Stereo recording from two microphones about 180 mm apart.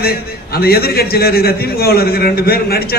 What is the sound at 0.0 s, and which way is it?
A man's voice, 60° left (ahead or behind).